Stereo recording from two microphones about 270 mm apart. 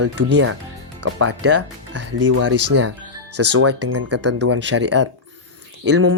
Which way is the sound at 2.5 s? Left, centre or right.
Right.